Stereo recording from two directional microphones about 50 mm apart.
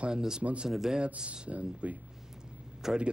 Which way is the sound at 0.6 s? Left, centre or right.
Centre.